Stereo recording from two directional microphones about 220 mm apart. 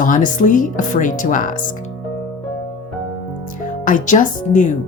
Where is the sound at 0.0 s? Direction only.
35° left (ahead or behind).